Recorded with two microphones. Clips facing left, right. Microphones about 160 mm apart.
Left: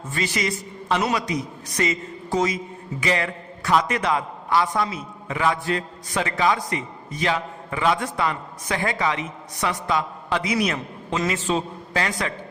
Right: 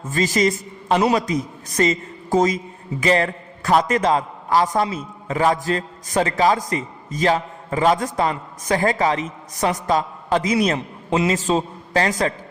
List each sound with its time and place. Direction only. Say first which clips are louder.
0.1 s a man's voice: right 7 dB; 40° right (ahead or behind)
1.2 s a man's voice: right 3 dB; 45° right (ahead or behind)